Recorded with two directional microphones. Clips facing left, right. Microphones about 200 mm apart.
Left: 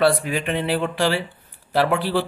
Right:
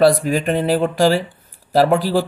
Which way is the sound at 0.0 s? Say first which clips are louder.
Right 5 dB; 40° right (ahead or behind).